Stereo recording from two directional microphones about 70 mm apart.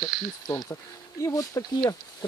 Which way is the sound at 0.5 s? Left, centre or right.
Left.